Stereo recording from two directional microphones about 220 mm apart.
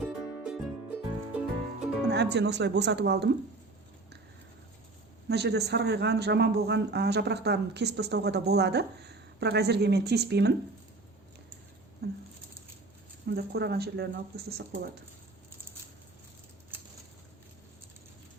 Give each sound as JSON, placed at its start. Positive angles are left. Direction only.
{"t": 0.0, "sound": "music", "side_deg": -5}
{"t": 2.0, "sound": "a man's voice", "side_deg": -50}
{"t": 5.3, "sound": "a man's voice", "side_deg": -50}
{"t": 13.2, "sound": "a man's voice", "side_deg": -50}